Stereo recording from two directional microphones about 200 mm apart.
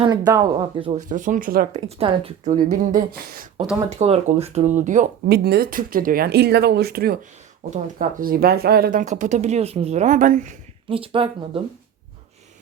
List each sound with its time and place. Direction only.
0.0 s speech: 20° right (ahead or behind)
1.0 s speech: 40° right (ahead or behind)
2.0 s speech: 30° right (ahead or behind)
2.5 s speech: 40° right (ahead or behind)
3.9 s speech: 30° right (ahead or behind)
5.2 s speech: 55° right (ahead or behind); by 10.6 s 40° right (ahead or behind)
10.8 s speech: 25° right (ahead or behind)